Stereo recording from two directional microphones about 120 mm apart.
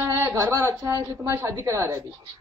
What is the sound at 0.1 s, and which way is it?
Speech, 25° right (ahead or behind).